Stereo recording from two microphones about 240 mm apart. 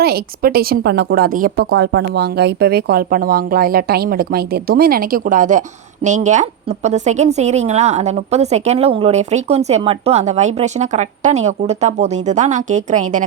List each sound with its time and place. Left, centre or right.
0.0 s speech: right